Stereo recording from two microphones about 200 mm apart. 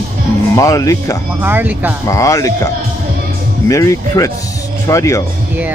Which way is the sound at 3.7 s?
15° left (ahead or behind).